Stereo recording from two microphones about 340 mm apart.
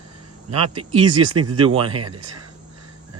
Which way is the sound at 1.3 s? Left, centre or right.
Right.